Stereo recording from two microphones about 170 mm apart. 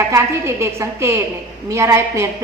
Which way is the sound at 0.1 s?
15° right (ahead or behind).